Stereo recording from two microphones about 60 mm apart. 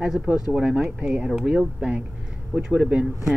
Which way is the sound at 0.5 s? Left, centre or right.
Centre.